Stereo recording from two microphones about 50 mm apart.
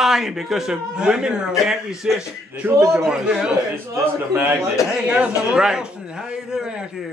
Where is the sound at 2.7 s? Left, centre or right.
Right.